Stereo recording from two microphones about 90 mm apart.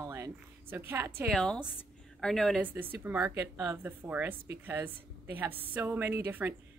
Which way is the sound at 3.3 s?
40° right (ahead or behind).